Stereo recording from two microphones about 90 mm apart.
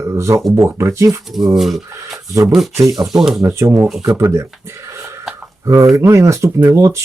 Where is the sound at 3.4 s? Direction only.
35° right (ahead or behind).